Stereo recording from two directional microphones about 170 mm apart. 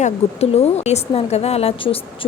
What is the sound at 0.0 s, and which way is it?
A woman's voice, 40° left (ahead or behind).